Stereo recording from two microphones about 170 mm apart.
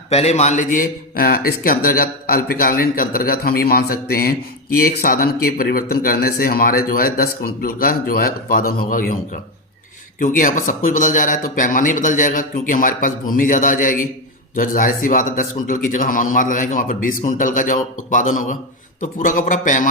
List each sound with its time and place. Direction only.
0.1 s a man's voice: 40° left (ahead or behind)